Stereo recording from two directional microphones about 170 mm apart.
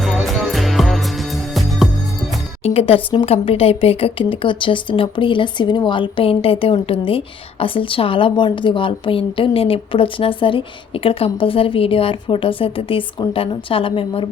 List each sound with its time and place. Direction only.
0.0 s music: centre (ahead or behind)
2.6 s a woman's voice: 35° left (ahead or behind)